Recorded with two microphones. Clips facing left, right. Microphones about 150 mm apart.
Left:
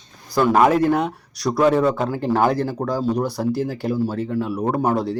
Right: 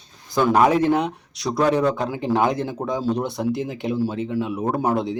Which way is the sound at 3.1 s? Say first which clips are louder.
Left 2 dB; 20° right (ahead or behind).